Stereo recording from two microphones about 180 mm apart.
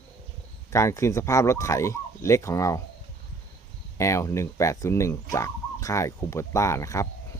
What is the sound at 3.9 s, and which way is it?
Speech, 15° left (ahead or behind).